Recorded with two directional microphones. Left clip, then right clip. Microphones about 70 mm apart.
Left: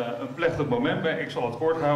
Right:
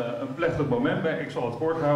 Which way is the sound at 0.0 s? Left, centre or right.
Left.